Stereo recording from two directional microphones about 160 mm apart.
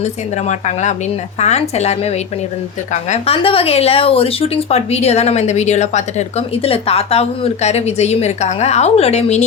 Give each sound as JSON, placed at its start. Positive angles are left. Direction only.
{"t": 0.0, "sound": "speech", "side_deg": 45}